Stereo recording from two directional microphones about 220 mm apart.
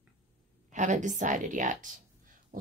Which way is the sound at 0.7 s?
35° right (ahead or behind).